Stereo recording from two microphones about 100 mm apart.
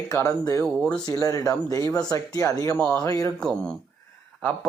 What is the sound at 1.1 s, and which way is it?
Speech, 35° left (ahead or behind).